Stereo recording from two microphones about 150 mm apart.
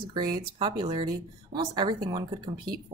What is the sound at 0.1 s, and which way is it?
Speech, 30° right (ahead or behind).